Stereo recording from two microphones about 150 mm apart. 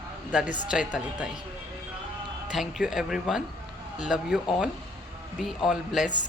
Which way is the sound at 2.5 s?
Centre (ahead or behind).